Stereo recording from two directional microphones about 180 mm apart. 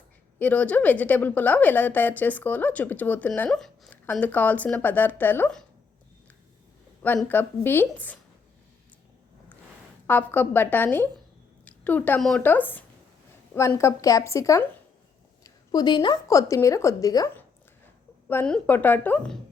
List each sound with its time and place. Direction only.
0.3 s a woman's voice: 10° left (ahead or behind)
7.0 s a woman's voice: 10° left (ahead or behind)
10.1 s a woman's voice: 10° left (ahead or behind)
18.3 s a woman's voice: 10° left (ahead or behind)